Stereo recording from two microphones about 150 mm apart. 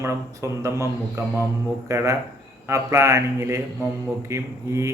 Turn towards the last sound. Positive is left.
turn(degrees=-20)  # may be behind; listen again after turning